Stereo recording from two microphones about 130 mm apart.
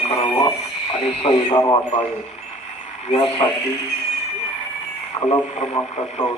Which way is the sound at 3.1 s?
40° left (ahead or behind).